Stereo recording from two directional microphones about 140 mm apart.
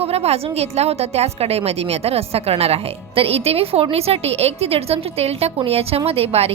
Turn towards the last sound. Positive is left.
turn(degrees=-45)  # may be behind; listen again after turning